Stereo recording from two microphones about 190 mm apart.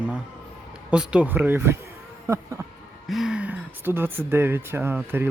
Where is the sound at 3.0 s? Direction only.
Centre (ahead or behind).